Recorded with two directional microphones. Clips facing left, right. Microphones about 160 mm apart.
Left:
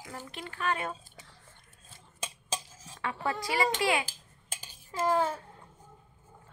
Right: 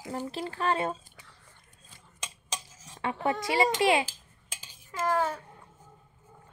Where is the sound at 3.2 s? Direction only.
20° right (ahead or behind).